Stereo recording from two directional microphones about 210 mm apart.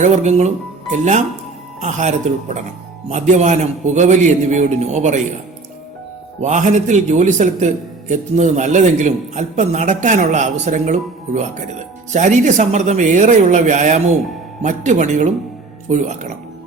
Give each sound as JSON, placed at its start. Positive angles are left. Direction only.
{"t": 0.0, "sound": "a man's voice", "side_deg": -35}
{"t": 1.8, "sound": "a man's voice", "side_deg": -35}
{"t": 6.4, "sound": "a man's voice", "side_deg": -35}